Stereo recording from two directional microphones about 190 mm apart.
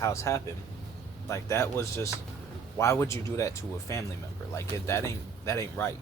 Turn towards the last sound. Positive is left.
turn(degrees=15)  # may be behind; listen again after turning